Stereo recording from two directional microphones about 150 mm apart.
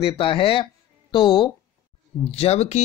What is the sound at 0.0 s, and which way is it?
Speech, 35° left (ahead or behind).